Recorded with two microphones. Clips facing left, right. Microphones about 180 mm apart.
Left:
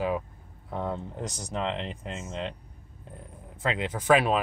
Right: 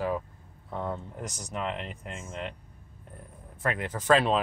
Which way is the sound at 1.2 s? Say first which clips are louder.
Left 2 dB; 35° left (ahead or behind).